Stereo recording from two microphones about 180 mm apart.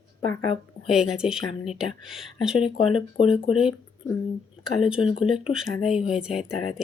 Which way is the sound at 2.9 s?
30° left (ahead or behind).